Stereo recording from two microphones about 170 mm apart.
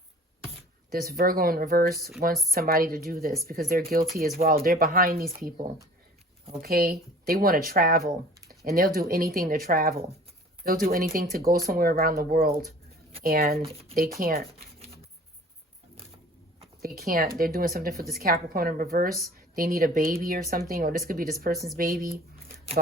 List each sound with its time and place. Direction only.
0.9 s speech: 60° right (ahead or behind)
16.8 s speech: 60° right (ahead or behind)